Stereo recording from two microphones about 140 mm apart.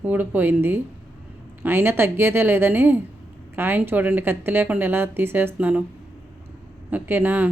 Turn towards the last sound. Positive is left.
turn(degrees=-10)  # may be behind; listen again after turning